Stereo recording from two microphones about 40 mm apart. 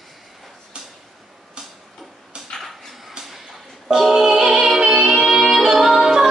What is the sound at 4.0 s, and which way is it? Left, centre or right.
Music, centre.